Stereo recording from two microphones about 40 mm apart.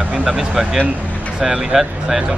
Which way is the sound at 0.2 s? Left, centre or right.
Centre.